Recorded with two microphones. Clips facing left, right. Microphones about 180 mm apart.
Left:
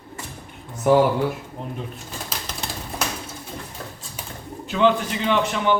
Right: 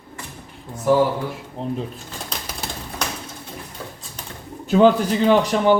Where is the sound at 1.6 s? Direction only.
30° right (ahead or behind).